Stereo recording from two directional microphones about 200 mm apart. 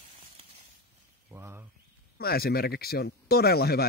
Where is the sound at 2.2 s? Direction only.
50° left (ahead or behind).